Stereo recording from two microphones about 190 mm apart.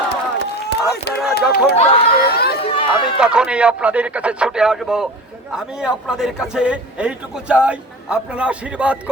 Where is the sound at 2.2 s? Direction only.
55° left (ahead or behind).